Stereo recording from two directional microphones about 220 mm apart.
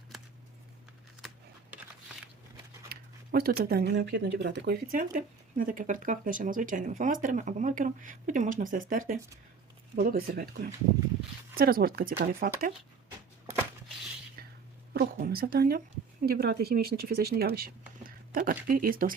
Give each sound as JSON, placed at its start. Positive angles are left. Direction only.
{"t": 2.9, "sound": "speech", "side_deg": -45}
{"t": 14.9, "sound": "speech", "side_deg": -40}